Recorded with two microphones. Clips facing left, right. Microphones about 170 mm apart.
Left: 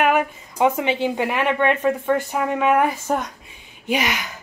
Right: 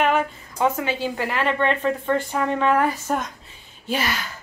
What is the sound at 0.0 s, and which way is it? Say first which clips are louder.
A woman's voice: left 2 dB; 15° left (ahead or behind).